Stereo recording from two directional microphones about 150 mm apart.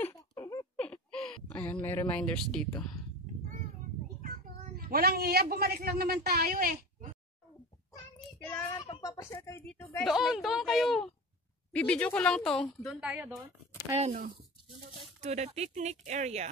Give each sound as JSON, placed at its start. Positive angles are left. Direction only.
{"t": 0.1, "sound": "baby laughter", "side_deg": 25}
{"t": 0.7, "sound": "a sound", "side_deg": 5}
{"t": 1.6, "sound": "a woman's voice", "side_deg": 15}
{"t": 4.7, "sound": "a man's voice", "side_deg": -90}
{"t": 8.5, "sound": "child singing", "side_deg": 20}
{"t": 9.0, "sound": "a sound", "side_deg": 25}
{"t": 9.6, "sound": "a woman's voice", "side_deg": 20}
{"t": 10.0, "sound": "a woman's voice", "side_deg": 0}
{"t": 13.0, "sound": "speech", "side_deg": -10}
{"t": 13.9, "sound": "speech", "side_deg": -45}